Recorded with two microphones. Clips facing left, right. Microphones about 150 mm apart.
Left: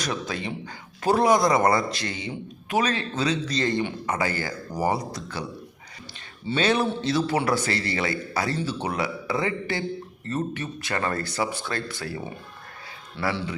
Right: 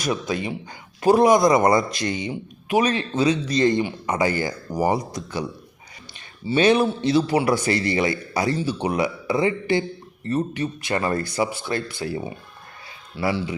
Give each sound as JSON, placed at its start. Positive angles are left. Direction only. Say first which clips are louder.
{"t": 0.0, "sound": "a man's voice", "louder": "right 5 dB", "side_deg": -15}